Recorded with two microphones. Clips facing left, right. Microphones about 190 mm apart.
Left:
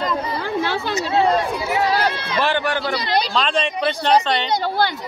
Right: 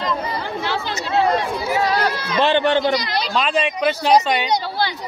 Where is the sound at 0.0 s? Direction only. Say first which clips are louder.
Left 1 dB; 50° left (ahead or behind).